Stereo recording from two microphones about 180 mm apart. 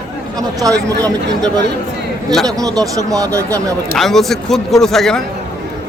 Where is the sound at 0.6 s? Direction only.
20° right (ahead or behind).